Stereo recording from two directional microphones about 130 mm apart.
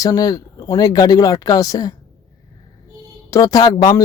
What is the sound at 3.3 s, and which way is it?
Speech, 30° left (ahead or behind).